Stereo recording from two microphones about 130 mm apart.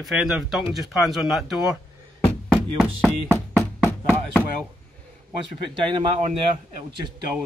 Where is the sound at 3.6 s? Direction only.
15° left (ahead or behind).